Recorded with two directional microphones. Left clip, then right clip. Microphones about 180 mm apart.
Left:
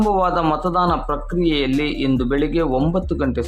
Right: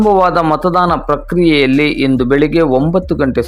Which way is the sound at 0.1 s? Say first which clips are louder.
Right 8 dB; 30° right (ahead or behind).